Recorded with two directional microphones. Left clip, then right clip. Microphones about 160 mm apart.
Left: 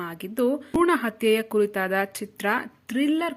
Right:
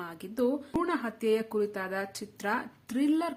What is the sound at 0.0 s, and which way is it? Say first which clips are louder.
A woman's voice: left 5 dB; 25° left (ahead or behind).